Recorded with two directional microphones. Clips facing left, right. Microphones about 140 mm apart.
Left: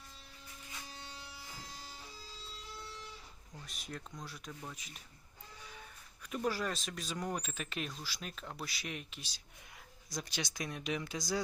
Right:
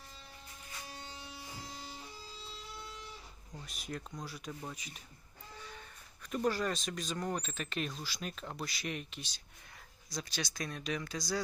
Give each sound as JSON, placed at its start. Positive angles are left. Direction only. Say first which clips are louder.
{"t": 1.0, "sound": "electric shaver", "louder": "right 2 dB", "side_deg": -25}
{"t": 3.5, "sound": "speech", "louder": "right 4 dB", "side_deg": 0}
{"t": 6.3, "sound": "speech", "louder": "right 3 dB", "side_deg": 5}
{"t": 10.2, "sound": "speech", "louder": "right 1 dB", "side_deg": 15}